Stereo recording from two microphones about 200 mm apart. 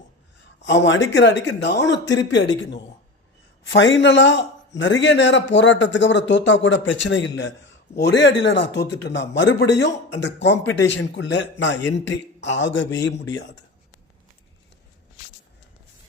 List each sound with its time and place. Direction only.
0.6 s speech: 65° left (ahead or behind)
3.6 s speech: 65° left (ahead or behind)